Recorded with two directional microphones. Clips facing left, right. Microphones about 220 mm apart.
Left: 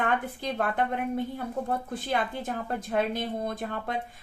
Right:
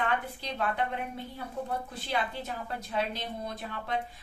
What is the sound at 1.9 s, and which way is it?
A woman's voice, 50° left (ahead or behind).